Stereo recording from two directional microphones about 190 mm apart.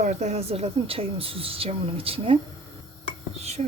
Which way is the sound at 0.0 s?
40° right (ahead or behind).